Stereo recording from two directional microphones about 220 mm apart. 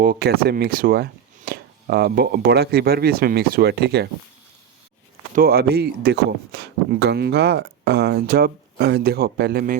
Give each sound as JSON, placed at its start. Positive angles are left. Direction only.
{"t": 0.0, "sound": "speech", "side_deg": -45}
{"t": 5.3, "sound": "speech", "side_deg": -45}